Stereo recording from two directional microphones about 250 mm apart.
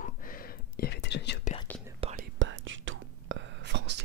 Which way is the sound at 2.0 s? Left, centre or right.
Right.